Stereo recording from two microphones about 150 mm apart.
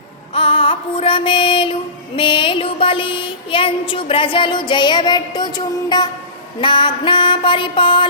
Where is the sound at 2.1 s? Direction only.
35° left (ahead or behind).